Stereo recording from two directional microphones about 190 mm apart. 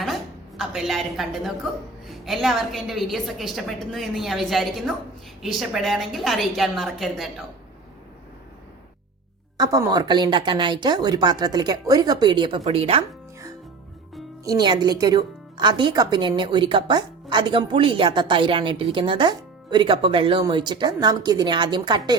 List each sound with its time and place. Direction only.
0.0 s a sound: centre (ahead or behind)
2.0 s a woman's voice: centre (ahead or behind)
9.6 s speech: 15° right (ahead or behind)
14.4 s speech: 20° right (ahead or behind)